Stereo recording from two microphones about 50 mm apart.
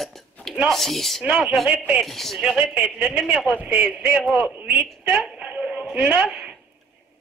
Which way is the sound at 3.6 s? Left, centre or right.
Right.